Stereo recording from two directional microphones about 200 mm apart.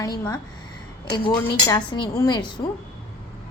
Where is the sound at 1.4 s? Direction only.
20° left (ahead or behind).